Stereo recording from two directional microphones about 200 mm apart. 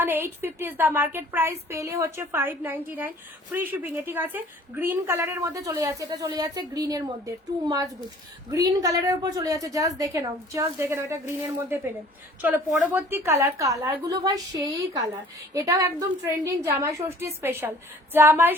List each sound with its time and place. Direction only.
0.0 s a woman's voice: 10° right (ahead or behind)
12.8 s a woman's voice: 10° right (ahead or behind)